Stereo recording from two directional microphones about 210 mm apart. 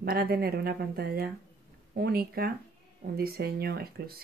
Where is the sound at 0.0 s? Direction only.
45° right (ahead or behind).